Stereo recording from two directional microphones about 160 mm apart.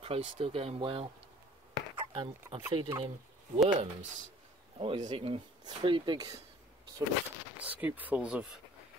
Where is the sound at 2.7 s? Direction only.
30° right (ahead or behind).